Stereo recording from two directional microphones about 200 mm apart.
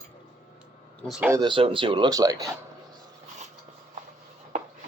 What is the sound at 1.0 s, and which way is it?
Speech, centre (ahead or behind).